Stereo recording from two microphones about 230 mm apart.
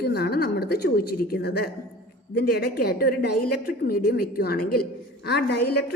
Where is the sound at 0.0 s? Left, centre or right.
Left.